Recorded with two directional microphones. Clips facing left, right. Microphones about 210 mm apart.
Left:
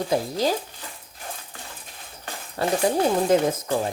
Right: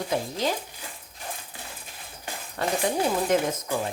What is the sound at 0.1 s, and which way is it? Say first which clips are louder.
Speech: left 4 dB; 35° left (ahead or behind).